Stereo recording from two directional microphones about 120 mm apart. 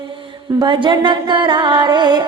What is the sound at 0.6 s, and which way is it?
Music, 40° right (ahead or behind).